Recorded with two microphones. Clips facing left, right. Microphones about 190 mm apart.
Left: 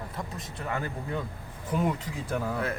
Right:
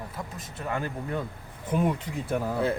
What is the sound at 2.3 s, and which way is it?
Speech, 10° right (ahead or behind).